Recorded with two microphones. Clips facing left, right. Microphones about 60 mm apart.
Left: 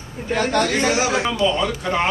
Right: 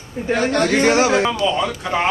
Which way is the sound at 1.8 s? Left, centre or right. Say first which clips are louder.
Right 1 dB; centre.